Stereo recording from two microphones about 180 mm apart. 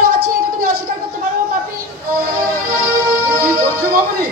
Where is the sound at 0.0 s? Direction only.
55° right (ahead or behind).